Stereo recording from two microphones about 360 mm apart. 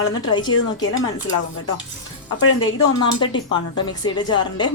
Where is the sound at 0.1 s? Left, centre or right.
Centre.